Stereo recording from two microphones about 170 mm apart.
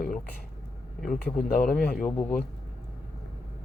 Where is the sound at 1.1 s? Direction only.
5° left (ahead or behind).